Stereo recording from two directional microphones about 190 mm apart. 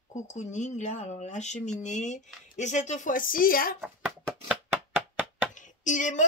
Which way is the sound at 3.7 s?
Centre (ahead or behind).